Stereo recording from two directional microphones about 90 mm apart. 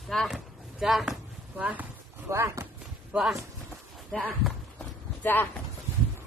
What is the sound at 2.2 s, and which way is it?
Speech, 30° right (ahead or behind).